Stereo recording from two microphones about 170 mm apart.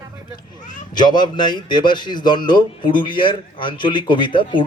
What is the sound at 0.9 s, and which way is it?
A man's voice, 25° left (ahead or behind).